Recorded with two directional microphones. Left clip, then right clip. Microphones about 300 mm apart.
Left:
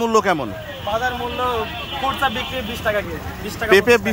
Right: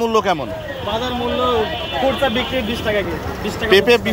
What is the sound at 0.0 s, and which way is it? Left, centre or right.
Speech, centre.